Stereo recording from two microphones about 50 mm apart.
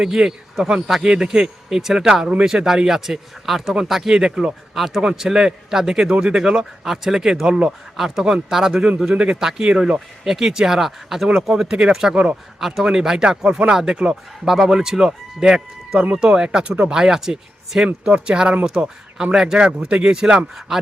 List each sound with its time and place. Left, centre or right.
0.0 s speech: centre
4.7 s a man's voice: centre
9.1 s speech: right
9.4 s speech: centre
10.2 s speech: centre
12.5 s speech: centre
17.8 s speech: centre